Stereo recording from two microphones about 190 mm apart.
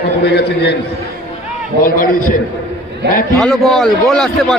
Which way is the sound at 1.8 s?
45° left (ahead or behind).